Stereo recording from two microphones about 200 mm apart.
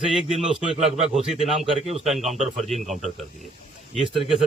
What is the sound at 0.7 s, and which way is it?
Speech, 30° right (ahead or behind).